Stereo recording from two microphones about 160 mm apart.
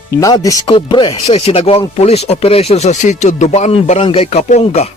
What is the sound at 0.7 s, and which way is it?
Speech, 30° left (ahead or behind).